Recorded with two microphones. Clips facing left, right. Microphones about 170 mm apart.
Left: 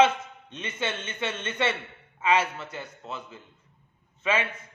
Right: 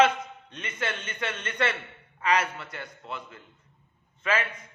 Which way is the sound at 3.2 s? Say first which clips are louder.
Left 1 dB; 10° left (ahead or behind).